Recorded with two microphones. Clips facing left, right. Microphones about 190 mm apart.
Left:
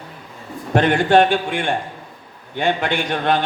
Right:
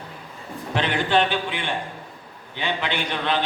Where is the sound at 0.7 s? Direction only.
50° left (ahead or behind).